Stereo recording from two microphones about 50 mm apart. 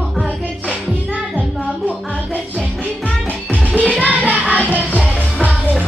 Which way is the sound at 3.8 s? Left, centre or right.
Left.